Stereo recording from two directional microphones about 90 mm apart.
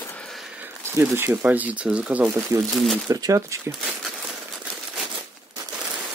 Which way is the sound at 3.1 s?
40° right (ahead or behind).